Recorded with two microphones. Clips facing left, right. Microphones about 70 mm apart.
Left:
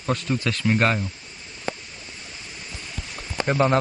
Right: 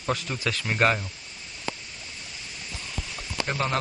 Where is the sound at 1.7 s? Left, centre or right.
Left.